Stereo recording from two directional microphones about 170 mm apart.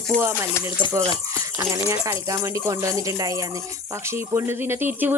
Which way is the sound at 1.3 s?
20° right (ahead or behind).